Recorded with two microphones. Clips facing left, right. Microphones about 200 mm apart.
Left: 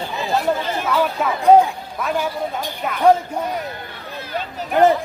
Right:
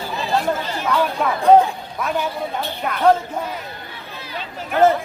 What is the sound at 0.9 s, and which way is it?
Speech, 5° left (ahead or behind).